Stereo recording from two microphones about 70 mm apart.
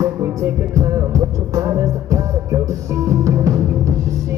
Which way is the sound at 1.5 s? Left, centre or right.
Right.